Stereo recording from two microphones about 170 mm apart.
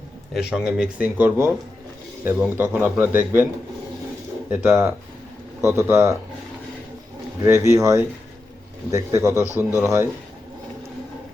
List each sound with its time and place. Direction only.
0.3 s speech: 5° right (ahead or behind)
4.4 s speech: 15° right (ahead or behind)
7.4 s speech: 15° right (ahead or behind)